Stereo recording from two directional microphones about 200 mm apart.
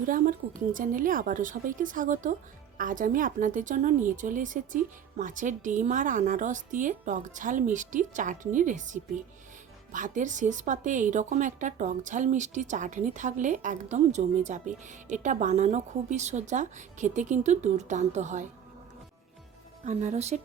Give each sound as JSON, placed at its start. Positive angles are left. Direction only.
{"t": 0.1, "sound": "speech", "side_deg": -45}
{"t": 19.8, "sound": "speech", "side_deg": -35}